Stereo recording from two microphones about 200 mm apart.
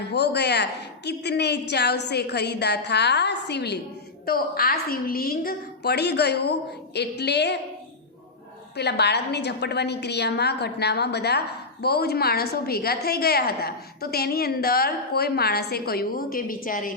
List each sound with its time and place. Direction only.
0.1 s a woman's voice: 55° left (ahead or behind)
8.7 s a woman's voice: 55° left (ahead or behind)